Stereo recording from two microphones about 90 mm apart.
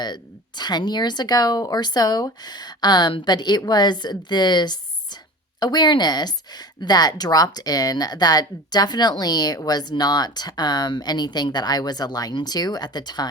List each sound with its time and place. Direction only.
0.0 s speech: 50° left (ahead or behind)